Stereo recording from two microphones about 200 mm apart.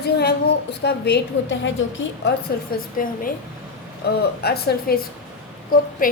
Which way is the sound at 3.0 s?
45° left (ahead or behind).